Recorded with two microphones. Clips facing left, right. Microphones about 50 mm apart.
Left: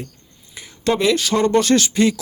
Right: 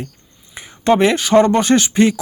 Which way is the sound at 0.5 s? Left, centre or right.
Right.